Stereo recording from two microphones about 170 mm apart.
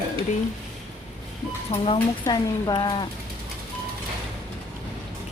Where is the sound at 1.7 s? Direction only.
35° left (ahead or behind).